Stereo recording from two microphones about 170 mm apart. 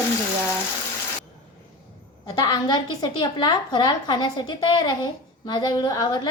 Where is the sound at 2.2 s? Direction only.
25° left (ahead or behind).